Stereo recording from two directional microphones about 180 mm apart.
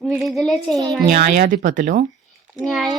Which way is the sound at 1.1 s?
55° right (ahead or behind).